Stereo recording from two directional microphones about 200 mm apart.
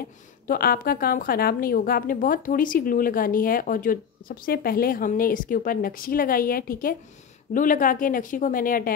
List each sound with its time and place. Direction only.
0.0 s a woman's voice: 50° left (ahead or behind)